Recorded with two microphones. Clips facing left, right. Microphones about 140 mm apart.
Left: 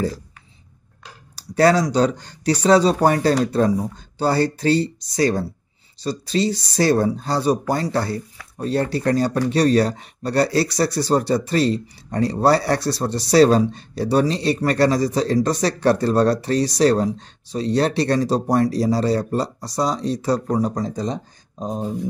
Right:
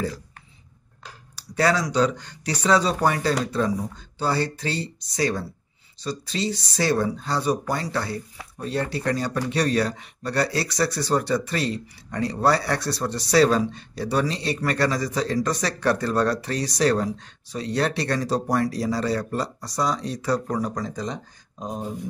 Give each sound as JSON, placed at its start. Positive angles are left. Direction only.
{"t": 1.3, "sound": "speech", "side_deg": 40}